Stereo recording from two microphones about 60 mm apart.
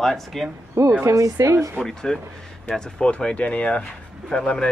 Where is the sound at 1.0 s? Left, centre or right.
Right.